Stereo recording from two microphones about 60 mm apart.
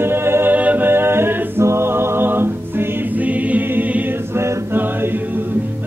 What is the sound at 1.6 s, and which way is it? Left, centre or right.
Music, right.